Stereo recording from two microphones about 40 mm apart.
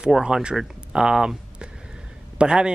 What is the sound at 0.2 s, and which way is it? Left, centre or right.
Speech, right.